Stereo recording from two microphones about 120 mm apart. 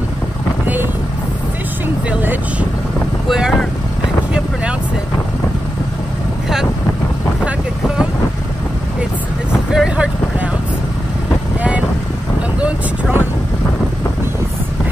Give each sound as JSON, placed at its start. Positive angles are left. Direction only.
{"t": 3.3, "sound": "speech", "side_deg": -5}
{"t": 9.5, "sound": "vehicle", "side_deg": -5}
{"t": 12.5, "sound": "vehicle", "side_deg": -10}